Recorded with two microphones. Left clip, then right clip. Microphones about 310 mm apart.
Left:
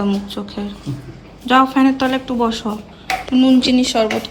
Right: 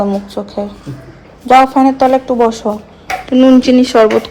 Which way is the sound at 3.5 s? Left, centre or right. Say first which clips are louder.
Right 7 dB; centre.